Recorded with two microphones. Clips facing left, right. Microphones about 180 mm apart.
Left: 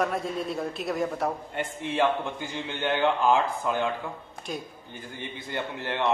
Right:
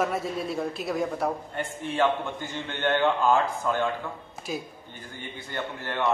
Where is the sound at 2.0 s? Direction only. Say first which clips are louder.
Even; 15° left (ahead or behind).